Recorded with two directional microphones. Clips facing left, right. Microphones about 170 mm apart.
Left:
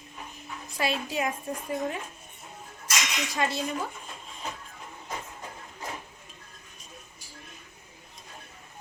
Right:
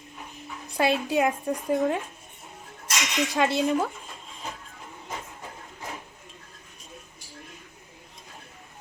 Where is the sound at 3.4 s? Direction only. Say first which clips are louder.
Right 4 dB; 70° right (ahead or behind).